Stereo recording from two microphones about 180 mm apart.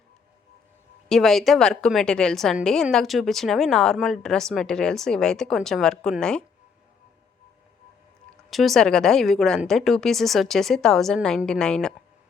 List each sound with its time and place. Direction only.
1.0 s a woman's voice: centre (ahead or behind)
8.4 s a woman's voice: centre (ahead or behind)